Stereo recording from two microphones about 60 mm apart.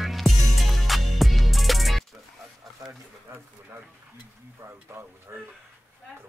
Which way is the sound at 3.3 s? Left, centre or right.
Right.